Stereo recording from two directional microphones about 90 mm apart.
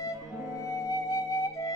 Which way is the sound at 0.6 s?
35° left (ahead or behind).